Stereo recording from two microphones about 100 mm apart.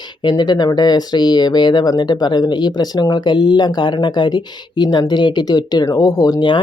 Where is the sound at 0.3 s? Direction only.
45° left (ahead or behind).